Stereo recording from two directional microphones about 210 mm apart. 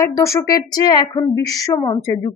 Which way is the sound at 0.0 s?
15° left (ahead or behind).